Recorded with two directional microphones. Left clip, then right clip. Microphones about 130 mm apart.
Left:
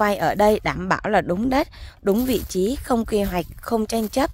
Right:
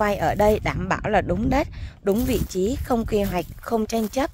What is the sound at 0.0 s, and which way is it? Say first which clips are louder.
A woman's voice: left 2 dB; 30° left (ahead or behind).